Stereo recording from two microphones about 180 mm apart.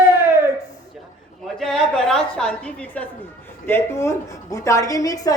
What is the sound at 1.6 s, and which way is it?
A man's voice, centre (ahead or behind).